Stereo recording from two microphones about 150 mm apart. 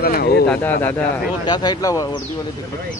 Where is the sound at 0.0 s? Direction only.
90° left.